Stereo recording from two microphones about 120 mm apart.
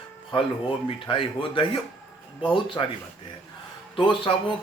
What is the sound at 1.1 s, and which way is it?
A man's voice, 45° left (ahead or behind).